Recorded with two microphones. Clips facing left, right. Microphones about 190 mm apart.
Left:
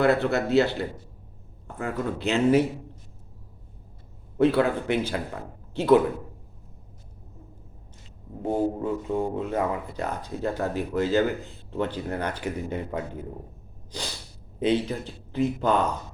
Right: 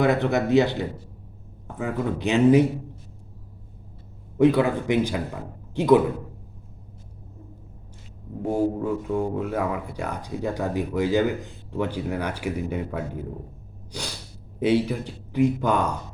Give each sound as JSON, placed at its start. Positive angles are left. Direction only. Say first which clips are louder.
{"t": 0.0, "sound": "speech", "louder": "right 1 dB", "side_deg": -15}
{"t": 4.4, "sound": "speech", "louder": "right 2 dB", "side_deg": -15}
{"t": 8.4, "sound": "speech", "louder": "right 2 dB", "side_deg": -10}
{"t": 14.6, "sound": "speech", "louder": "right 3 dB", "side_deg": -10}